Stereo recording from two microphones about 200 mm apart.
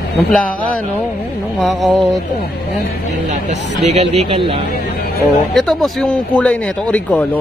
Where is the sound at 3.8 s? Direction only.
35° right (ahead or behind).